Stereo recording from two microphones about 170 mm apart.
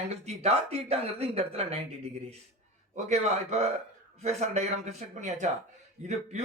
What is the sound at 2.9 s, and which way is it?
Speech, 40° right (ahead or behind).